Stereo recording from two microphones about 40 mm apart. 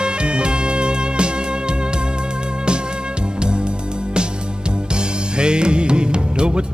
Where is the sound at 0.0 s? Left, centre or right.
Right.